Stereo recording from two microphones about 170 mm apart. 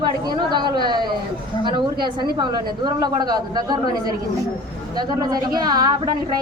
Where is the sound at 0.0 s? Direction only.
25° right (ahead or behind).